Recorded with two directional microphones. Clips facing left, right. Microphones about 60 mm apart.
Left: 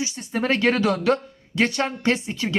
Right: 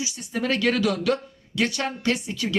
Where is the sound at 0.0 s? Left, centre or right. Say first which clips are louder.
Left 3 dB; left.